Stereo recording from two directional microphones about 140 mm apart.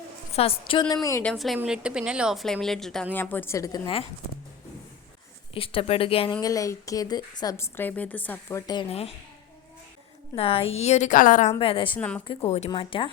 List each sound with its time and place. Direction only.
0.3 s a woman's voice: 45° left (ahead or behind)
1.2 s speech: 5° left (ahead or behind); by 3.8 s 20° left (ahead or behind)
5.5 s speech: 40° left (ahead or behind)
6.4 s speech: 25° left (ahead or behind)
7.5 s a woman's voice: 15° left (ahead or behind)
8.9 s a woman's voice: 45° left (ahead or behind)
10.3 s a woman's voice: 40° left (ahead or behind); by 11.5 s 65° left (ahead or behind)
11.6 s speech: 40° left (ahead or behind)
11.9 s a woman's voice: 10° left (ahead or behind)
12.5 s a woman's voice: 50° left (ahead or behind)
12.7 s speech: 35° left (ahead or behind)